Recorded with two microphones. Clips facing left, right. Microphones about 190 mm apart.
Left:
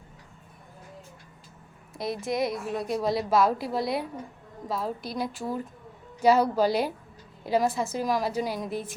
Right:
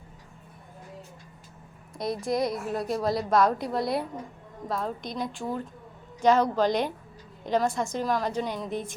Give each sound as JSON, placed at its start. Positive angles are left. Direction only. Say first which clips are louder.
{"t": 2.0, "sound": "a woman's voice", "louder": "right 1 dB", "side_deg": 0}